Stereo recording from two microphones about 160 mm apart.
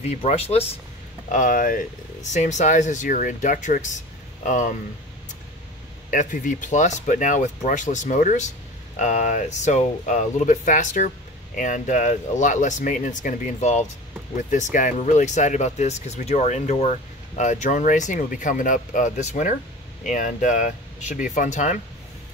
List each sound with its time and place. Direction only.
0.0 s speech: 45° left (ahead or behind)
1.3 s speech: 55° left (ahead or behind)
6.0 s speech: 55° left (ahead or behind)